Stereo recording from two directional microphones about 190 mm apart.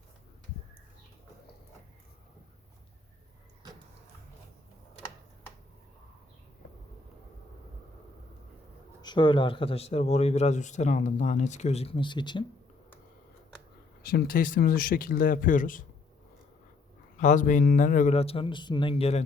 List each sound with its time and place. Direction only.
9.0 s a man's voice: 25° left (ahead or behind)
14.0 s speech: 50° left (ahead or behind)
17.2 s a man's voice: 40° left (ahead or behind)